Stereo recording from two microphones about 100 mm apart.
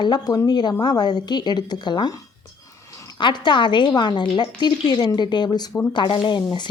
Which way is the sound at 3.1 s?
50° left (ahead or behind).